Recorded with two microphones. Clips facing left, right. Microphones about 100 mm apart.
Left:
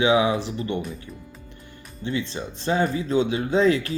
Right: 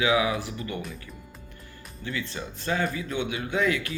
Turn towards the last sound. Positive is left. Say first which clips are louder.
# left 6 dB
turn(degrees=30)  # may be behind; listen again after turning